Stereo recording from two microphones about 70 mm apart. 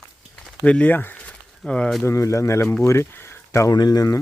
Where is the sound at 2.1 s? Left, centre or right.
Left.